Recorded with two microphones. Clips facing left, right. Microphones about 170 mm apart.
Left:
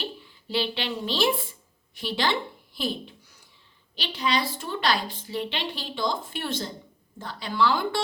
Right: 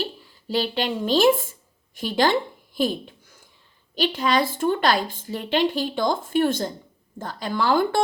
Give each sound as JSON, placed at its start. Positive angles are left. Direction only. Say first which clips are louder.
{"t": 0.0, "sound": "a woman's voice", "louder": "right 5 dB", "side_deg": -40}